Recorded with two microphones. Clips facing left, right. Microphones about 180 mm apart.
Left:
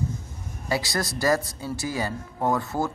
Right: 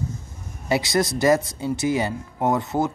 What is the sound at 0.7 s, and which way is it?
Speech, 20° right (ahead or behind).